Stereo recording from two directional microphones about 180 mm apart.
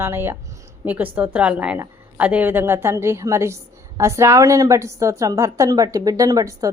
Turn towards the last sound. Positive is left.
turn(degrees=-20)  # may be behind; listen again after turning